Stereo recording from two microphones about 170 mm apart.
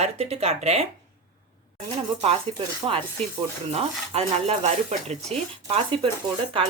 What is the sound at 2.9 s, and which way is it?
A woman's voice, 35° right (ahead or behind).